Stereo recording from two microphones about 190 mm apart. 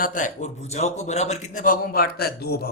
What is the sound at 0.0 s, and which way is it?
A man's voice, 45° left (ahead or behind).